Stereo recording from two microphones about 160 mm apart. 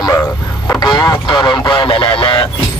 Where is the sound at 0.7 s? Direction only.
25° left (ahead or behind).